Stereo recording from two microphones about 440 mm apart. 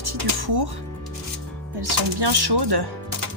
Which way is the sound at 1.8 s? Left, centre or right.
Right.